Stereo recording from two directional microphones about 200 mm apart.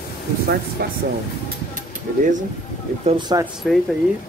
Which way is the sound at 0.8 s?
50° right (ahead or behind).